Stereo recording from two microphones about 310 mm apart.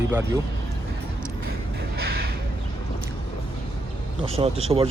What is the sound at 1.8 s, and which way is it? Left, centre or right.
Music, right.